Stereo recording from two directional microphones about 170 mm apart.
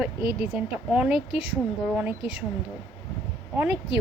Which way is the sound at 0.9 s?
5° right (ahead or behind).